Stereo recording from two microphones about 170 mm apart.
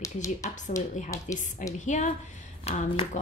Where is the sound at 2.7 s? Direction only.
35° left (ahead or behind).